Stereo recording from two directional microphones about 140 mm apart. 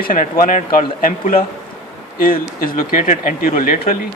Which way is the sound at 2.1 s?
90° left.